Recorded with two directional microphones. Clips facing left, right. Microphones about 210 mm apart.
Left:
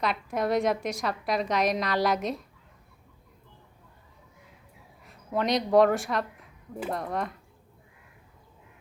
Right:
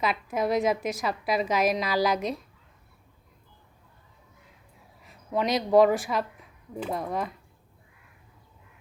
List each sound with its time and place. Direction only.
0.0 s a woman's voice: centre (ahead or behind)
5.0 s a woman's voice: centre (ahead or behind)